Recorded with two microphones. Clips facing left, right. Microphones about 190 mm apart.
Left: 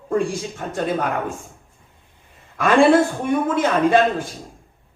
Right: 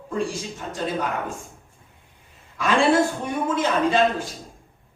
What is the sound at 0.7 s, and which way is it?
Speech, 55° left (ahead or behind).